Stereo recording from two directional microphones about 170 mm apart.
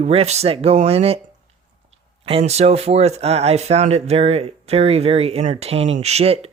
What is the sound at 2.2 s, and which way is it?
Speech, 35° right (ahead or behind).